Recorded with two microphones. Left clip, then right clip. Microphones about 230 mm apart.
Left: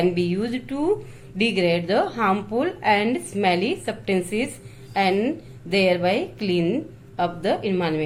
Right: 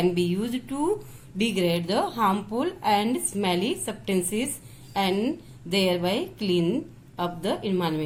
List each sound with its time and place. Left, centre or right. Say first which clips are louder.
0.0 s a woman's voice: left 3 dB; right